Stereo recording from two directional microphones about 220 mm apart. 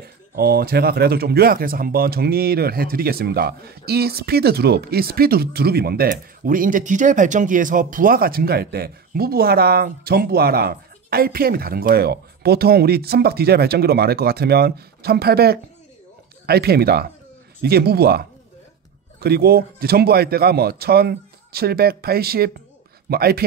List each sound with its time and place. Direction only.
0.4 s speech: 45° right (ahead or behind)